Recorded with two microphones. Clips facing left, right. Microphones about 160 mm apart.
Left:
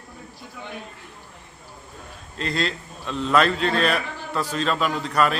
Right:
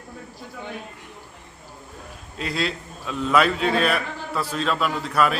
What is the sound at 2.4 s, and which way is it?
A man's voice, 5° right (ahead or behind).